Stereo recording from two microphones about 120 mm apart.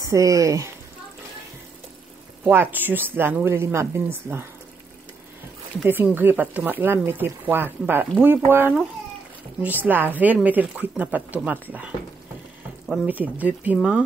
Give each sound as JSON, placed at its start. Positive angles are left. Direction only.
{"t": 0.0, "sound": "speech", "side_deg": -25}
{"t": 2.4, "sound": "speech", "side_deg": -15}
{"t": 5.9, "sound": "speech", "side_deg": -15}
{"t": 12.8, "sound": "speech", "side_deg": -5}